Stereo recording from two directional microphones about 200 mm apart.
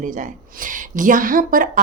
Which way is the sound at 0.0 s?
40° right (ahead or behind).